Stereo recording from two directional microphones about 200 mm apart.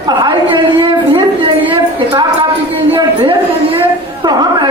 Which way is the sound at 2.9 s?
20° right (ahead or behind).